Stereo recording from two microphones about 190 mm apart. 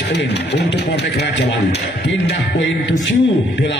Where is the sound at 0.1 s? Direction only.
65° left (ahead or behind).